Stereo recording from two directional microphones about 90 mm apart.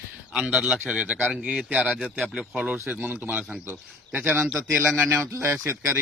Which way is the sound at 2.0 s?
10° left (ahead or behind).